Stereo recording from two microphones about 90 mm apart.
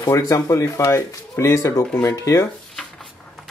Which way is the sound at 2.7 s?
Centre (ahead or behind).